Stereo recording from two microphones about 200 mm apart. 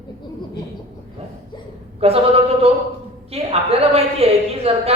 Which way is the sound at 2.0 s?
30° right (ahead or behind).